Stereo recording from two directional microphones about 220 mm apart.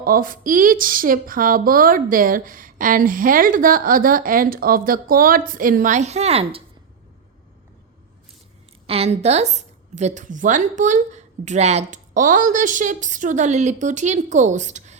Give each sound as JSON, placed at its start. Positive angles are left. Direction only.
{"t": 0.0, "sound": "speech", "side_deg": -40}
{"t": 8.9, "sound": "speech", "side_deg": -30}